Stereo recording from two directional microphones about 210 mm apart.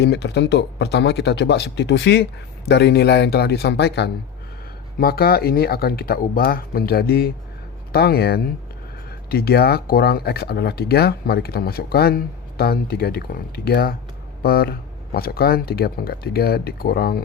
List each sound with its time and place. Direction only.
0.0 s speech: 50° left (ahead or behind)